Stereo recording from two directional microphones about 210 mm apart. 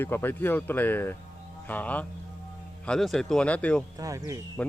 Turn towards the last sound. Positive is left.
turn(degrees=-15)  # may be behind; listen again after turning